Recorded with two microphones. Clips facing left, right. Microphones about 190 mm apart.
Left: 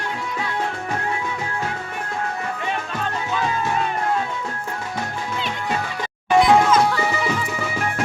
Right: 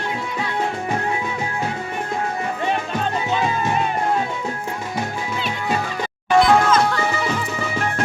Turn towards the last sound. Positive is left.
turn(degrees=5)  # may be behind; listen again after turning